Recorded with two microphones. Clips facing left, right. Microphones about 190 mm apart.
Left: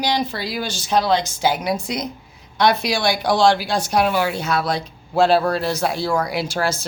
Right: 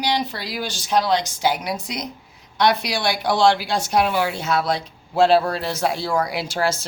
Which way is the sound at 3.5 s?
25° right (ahead or behind).